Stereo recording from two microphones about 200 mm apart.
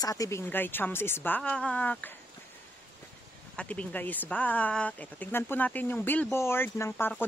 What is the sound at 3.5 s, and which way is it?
Speech, 5° left (ahead or behind).